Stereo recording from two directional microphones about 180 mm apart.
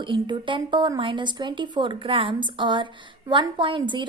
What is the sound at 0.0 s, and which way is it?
Speech, 25° right (ahead or behind).